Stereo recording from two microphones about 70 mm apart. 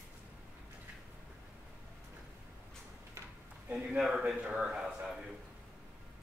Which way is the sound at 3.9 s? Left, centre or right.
Centre.